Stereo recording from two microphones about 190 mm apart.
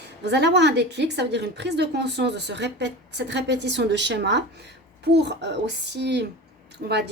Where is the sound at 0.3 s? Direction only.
65° right (ahead or behind).